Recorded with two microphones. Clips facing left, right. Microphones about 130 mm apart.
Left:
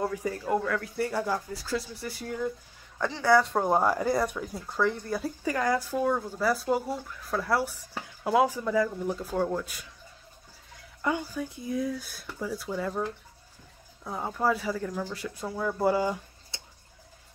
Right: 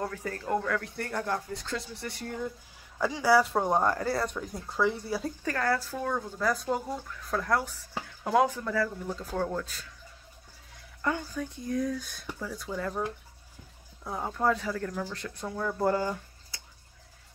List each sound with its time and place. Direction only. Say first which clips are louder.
0.0 s speech: left 4 dB; 10° left (ahead or behind)
3.0 s speech: left 1 dB; 10° right (ahead or behind); by 4.4 s 15° left (ahead or behind)
4.4 s speech: left 1 dB; centre (ahead or behind)
5.4 s speech: left 3 dB; 15° left (ahead or behind)
11.0 s speech: left 2 dB; 10° left (ahead or behind)
14.0 s speech: even; centre (ahead or behind)
16.5 s tick-tock: left 3 dB; 25° left (ahead or behind)